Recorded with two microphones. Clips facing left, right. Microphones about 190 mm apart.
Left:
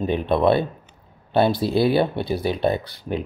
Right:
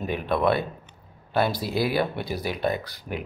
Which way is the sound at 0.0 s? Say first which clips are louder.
Left 5 dB; 25° left (ahead or behind).